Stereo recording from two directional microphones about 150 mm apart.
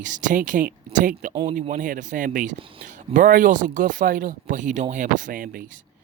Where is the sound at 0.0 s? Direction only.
55° right (ahead or behind).